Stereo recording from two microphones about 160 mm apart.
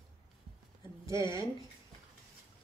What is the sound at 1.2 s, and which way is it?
Speech, 20° right (ahead or behind).